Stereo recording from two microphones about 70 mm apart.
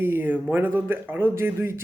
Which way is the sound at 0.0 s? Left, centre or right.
Right.